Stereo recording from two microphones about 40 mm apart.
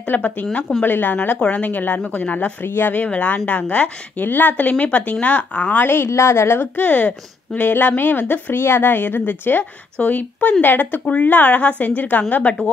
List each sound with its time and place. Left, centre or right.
0.0 s a woman's voice: left
2.6 s speech: left
3.0 s speech: left
4.2 s a woman's voice: left
5.9 s a woman's voice: left
6.8 s speech: left
10.0 s a woman's voice: left